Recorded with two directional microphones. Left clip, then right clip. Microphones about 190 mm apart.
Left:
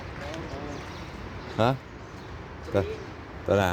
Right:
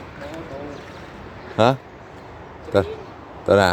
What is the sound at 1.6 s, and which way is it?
Speech, 30° right (ahead or behind).